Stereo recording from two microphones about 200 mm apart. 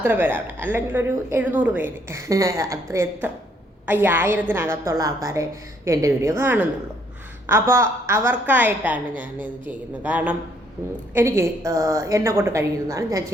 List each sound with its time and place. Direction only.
0.0 s a woman's voice: 10° right (ahead or behind)